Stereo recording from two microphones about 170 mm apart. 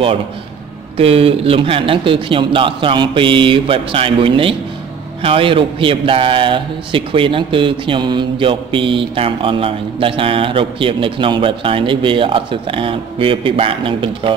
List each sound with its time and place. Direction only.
0.9 s a man's voice: 35° right (ahead or behind)